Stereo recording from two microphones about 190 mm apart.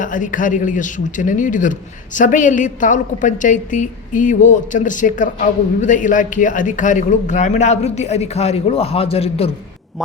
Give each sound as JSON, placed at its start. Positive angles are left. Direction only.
{"t": 0.0, "sound": "a man's voice", "side_deg": 45}